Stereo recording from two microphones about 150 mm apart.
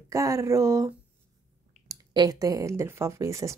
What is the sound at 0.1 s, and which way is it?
Speech, 20° right (ahead or behind).